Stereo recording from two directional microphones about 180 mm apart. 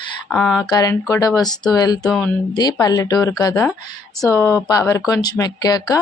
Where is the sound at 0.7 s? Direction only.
20° left (ahead or behind).